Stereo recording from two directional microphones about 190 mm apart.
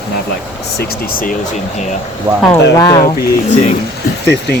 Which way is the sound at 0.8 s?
50° left (ahead or behind).